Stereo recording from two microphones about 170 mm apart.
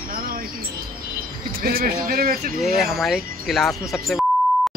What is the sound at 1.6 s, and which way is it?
Speech, 60° right (ahead or behind).